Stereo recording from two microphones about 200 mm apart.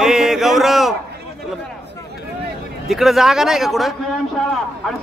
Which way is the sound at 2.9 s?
Centre (ahead or behind).